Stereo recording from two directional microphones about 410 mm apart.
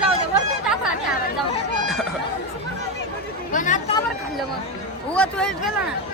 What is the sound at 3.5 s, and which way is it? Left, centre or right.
Chatter, centre.